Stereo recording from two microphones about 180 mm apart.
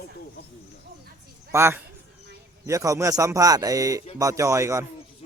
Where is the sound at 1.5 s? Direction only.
15° right (ahead or behind).